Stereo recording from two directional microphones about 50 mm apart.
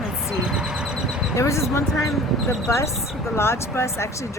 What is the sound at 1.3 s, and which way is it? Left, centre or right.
Speech, left.